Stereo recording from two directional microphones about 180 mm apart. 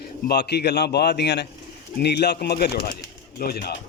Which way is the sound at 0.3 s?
65° left (ahead or behind).